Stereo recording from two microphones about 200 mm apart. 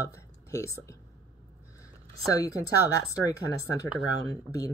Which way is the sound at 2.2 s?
15° left (ahead or behind).